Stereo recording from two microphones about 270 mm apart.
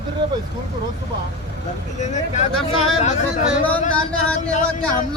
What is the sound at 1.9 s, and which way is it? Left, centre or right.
Speech, left.